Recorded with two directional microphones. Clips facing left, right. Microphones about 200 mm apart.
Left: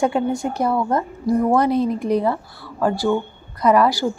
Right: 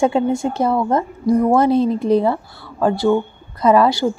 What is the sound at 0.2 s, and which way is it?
Speech, 25° right (ahead or behind).